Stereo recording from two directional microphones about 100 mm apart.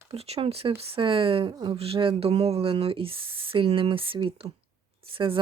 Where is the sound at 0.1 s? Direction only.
85° right.